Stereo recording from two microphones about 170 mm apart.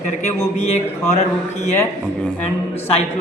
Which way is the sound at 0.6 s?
40° left (ahead or behind).